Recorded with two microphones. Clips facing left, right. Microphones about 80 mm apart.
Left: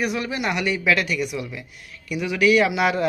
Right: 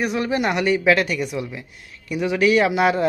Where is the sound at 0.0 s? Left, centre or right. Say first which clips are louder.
Right 3 dB; right.